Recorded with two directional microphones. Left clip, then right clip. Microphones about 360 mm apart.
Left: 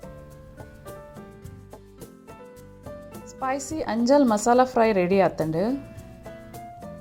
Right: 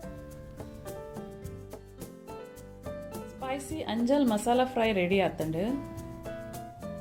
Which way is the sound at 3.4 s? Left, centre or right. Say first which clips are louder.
Left 8 dB; centre.